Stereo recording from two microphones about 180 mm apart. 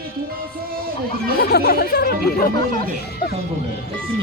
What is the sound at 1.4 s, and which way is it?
Speech, 65° left (ahead or behind).